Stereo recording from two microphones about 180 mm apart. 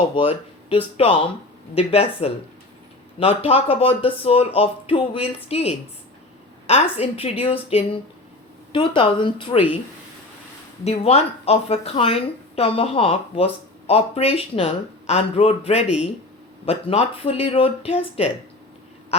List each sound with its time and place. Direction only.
0.2 s a woman's voice: 30° left (ahead or behind)
10.8 s a woman's voice: 35° left (ahead or behind)